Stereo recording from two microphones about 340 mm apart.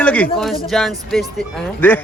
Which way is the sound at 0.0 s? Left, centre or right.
Centre.